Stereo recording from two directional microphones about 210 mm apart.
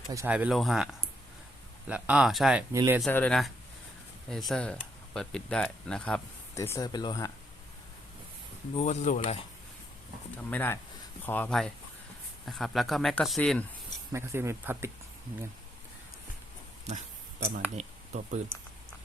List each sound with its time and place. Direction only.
0.1 s speech: 10° right (ahead or behind)
2.7 s speech: 15° right (ahead or behind)
3.0 s speech: 10° left (ahead or behind)
8.7 s speech: 30° left (ahead or behind)
10.3 s speech: 10° left (ahead or behind)
14.1 s speech: 10° right (ahead or behind)
17.7 s speech: 35° right (ahead or behind)